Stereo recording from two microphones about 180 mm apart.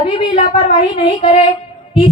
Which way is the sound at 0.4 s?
30° left (ahead or behind).